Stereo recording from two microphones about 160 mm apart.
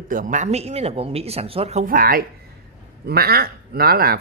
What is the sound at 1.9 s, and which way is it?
Speech, 65° right (ahead or behind).